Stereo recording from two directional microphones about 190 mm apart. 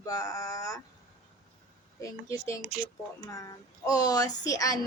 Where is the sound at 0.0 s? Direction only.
20° left (ahead or behind).